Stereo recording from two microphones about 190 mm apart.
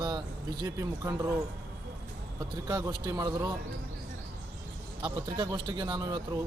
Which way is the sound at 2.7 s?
20° right (ahead or behind).